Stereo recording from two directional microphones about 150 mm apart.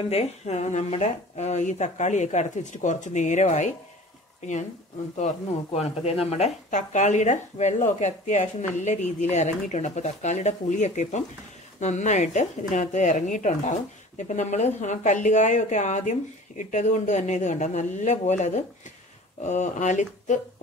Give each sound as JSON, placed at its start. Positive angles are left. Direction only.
{"t": 0.1, "sound": "speech", "side_deg": 45}